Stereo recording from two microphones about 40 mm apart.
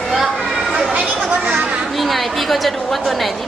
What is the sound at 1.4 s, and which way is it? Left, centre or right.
Chatter, right.